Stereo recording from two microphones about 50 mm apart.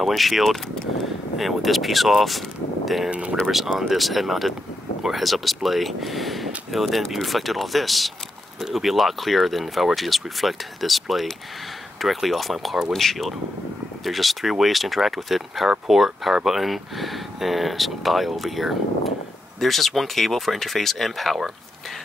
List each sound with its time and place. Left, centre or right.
0.0 s speech: centre
3.1 s speech: right
3.4 s speech: centre